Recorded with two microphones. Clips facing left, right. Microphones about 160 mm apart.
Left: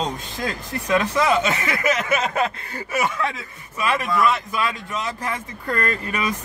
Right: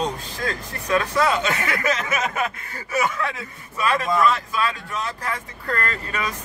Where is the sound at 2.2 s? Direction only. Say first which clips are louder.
Left 3 dB; 30° left (ahead or behind).